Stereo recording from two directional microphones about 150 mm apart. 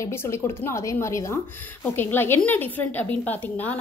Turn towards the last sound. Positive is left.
turn(degrees=10)  # may be behind; listen again after turning